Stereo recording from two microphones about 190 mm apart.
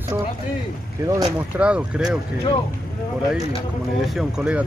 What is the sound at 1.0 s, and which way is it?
Speech, 20° right (ahead or behind).